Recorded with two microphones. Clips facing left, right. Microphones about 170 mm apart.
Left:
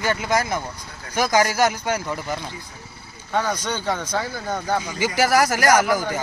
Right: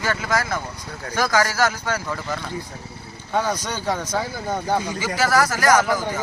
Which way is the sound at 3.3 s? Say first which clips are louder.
Even; 10° right (ahead or behind).